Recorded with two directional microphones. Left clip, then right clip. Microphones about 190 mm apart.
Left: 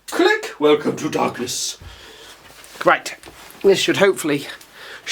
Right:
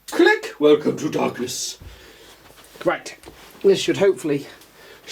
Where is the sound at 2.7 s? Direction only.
20° left (ahead or behind).